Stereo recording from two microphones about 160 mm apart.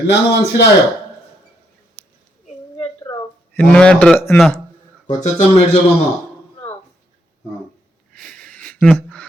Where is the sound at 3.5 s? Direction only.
5° left (ahead or behind).